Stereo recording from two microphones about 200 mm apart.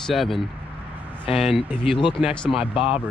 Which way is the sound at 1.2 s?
30° left (ahead or behind).